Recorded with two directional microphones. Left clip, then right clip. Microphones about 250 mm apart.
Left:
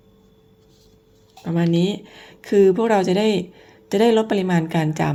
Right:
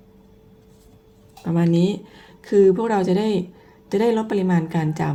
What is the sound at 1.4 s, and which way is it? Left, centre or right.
Speech, centre.